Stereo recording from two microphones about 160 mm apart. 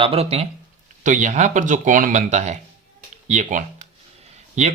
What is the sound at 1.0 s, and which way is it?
Speech, 50° right (ahead or behind).